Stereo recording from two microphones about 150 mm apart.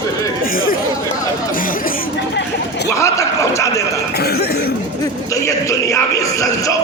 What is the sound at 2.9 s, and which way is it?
Speech, 20° left (ahead or behind).